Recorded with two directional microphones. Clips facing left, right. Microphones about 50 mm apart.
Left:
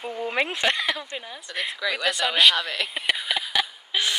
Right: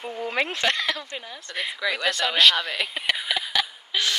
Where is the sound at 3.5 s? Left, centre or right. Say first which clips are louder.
Even; centre.